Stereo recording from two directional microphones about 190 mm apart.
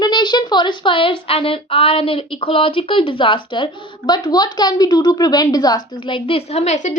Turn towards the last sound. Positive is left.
turn(degrees=40)  # may be behind; listen again after turning